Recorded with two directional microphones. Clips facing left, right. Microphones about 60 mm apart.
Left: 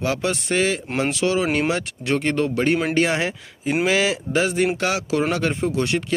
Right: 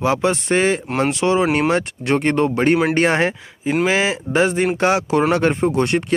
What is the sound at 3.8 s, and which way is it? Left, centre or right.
Speech, right.